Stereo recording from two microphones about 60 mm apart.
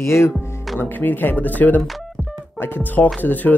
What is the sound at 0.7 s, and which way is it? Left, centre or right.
Speech, left.